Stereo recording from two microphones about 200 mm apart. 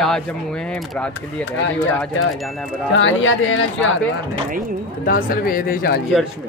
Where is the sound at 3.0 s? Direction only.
75° left (ahead or behind).